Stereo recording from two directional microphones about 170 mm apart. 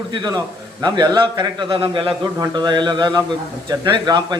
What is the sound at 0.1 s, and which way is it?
A man's voice, 25° right (ahead or behind).